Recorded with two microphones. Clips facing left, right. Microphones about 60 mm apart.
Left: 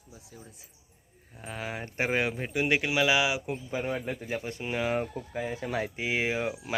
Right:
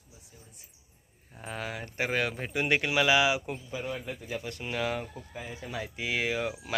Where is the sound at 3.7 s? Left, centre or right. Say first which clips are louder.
Left 5 dB; left.